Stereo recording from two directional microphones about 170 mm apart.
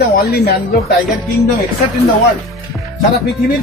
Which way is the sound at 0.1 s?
65° left (ahead or behind).